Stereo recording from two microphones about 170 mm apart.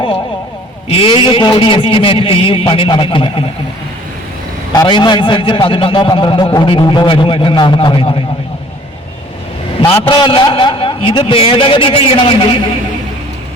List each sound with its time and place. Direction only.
0.9 s a man's voice: 30° left (ahead or behind)
4.7 s a man's voice: 25° left (ahead or behind)
10.0 s a man's voice: 30° left (ahead or behind)